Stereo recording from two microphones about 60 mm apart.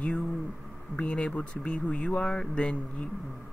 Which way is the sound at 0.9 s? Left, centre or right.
Centre.